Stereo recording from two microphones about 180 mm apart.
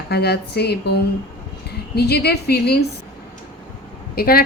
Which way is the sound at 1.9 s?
65° left (ahead or behind).